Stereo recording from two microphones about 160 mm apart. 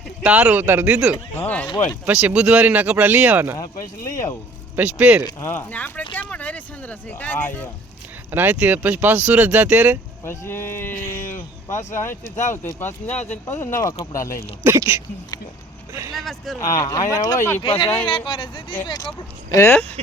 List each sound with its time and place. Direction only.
0.2 s speech: 5° right (ahead or behind)
1.4 s speech: 10° left (ahead or behind)
2.0 s speech: 10° right (ahead or behind)
4.8 s speech: 5° right (ahead or behind)
5.2 s speech: 15° left (ahead or behind)
8.3 s speech: 10° right (ahead or behind)
10.2 s speech: 15° left (ahead or behind)
14.6 s speech: 15° right (ahead or behind)
16.1 s speech: centre (ahead or behind)
16.6 s speech: 20° left (ahead or behind)
19.5 s speech: 15° left (ahead or behind)